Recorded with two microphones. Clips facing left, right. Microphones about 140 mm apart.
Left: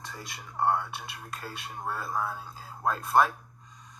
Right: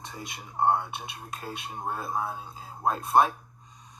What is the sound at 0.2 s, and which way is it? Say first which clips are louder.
Speech: right 2 dB; 25° right (ahead or behind).